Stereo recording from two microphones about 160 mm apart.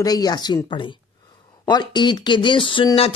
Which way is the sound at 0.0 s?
25° left (ahead or behind).